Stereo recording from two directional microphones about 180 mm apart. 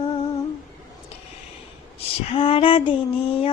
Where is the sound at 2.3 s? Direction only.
30° left (ahead or behind).